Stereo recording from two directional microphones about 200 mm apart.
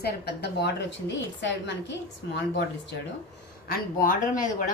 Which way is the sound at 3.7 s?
45° left (ahead or behind).